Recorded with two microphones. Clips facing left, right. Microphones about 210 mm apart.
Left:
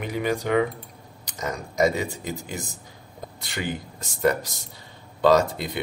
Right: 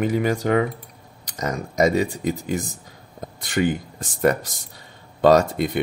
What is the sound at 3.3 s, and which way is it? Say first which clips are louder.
Speech: right 9 dB; 50° right (ahead or behind).